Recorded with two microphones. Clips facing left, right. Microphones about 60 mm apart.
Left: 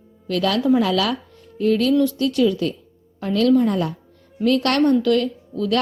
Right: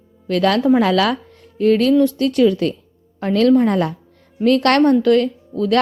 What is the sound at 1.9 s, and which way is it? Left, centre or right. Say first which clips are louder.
A woman's voice: right 3 dB; right.